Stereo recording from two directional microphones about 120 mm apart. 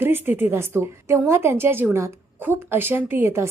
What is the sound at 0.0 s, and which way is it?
A woman's voice, 15° right (ahead or behind).